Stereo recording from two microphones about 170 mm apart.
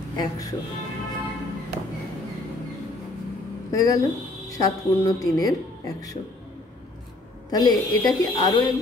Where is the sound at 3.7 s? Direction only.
20° left (ahead or behind).